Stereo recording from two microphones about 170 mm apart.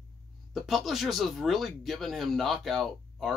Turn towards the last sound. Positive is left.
turn(degrees=0)  # may be behind; listen again after turning